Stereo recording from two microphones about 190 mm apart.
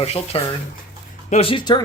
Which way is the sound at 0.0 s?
30° left (ahead or behind).